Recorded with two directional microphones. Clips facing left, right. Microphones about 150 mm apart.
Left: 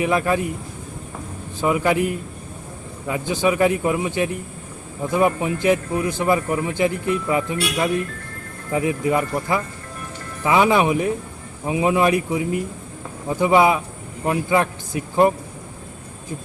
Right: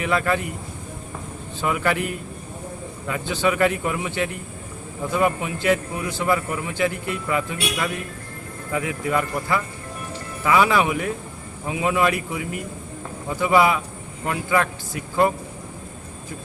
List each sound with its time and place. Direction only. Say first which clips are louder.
0.0 s a man's voice: left 3 dB; 15° left (ahead or behind)
1.6 s a man's voice: left 4 dB; 20° left (ahead or behind)
3.1 s a man's voice: left 2 dB; 15° left (ahead or behind)